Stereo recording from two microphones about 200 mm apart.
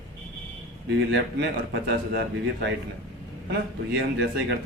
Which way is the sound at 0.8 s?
60° right (ahead or behind).